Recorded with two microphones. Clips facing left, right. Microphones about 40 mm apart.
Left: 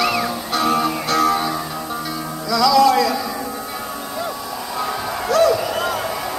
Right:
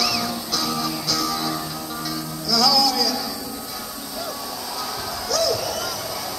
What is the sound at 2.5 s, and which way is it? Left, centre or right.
Music, left.